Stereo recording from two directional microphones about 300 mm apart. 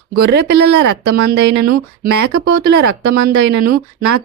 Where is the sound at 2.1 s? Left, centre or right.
Right.